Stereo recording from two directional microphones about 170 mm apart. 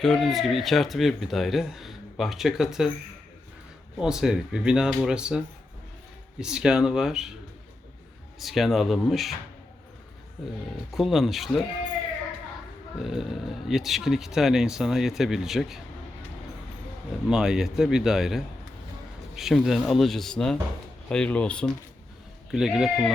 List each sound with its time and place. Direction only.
0.0 s speech: centre (ahead or behind)
3.9 s speech: 5° right (ahead or behind)
6.4 s speech: 5° right (ahead or behind)
8.4 s speech: centre (ahead or behind)
10.9 s speech: centre (ahead or behind)
13.0 s speech: centre (ahead or behind)
17.2 s speech: 5° right (ahead or behind)